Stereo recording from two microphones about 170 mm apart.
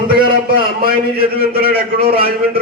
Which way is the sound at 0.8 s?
65° right (ahead or behind).